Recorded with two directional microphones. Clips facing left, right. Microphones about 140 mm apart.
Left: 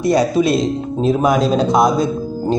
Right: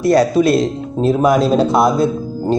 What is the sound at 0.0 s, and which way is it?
Speech, centre (ahead or behind).